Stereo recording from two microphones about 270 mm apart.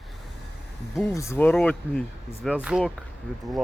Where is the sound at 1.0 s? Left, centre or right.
Centre.